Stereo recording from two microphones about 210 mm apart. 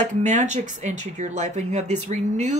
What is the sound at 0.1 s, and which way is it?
Speech, 35° right (ahead or behind).